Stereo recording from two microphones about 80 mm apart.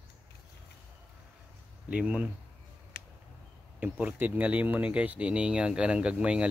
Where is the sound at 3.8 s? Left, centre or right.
Right.